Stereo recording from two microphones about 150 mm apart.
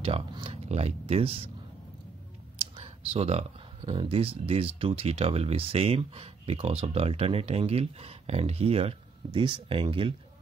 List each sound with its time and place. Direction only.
0.0 s speech: 40° right (ahead or behind)
2.6 s computer keyboard: 40° right (ahead or behind)
3.8 s speech: 35° right (ahead or behind)